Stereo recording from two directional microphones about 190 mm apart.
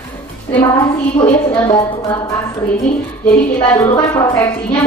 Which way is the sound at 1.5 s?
25° left (ahead or behind).